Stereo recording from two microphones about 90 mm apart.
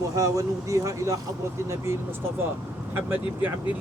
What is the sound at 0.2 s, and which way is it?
Speech, 35° right (ahead or behind).